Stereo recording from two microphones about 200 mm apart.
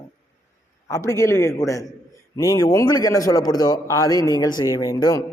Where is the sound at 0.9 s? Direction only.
15° left (ahead or behind).